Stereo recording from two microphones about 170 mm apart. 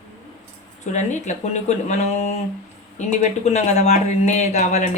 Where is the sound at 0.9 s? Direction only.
45° left (ahead or behind).